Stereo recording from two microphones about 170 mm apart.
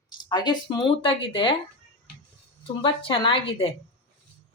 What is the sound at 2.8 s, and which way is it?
Speech, 30° left (ahead or behind).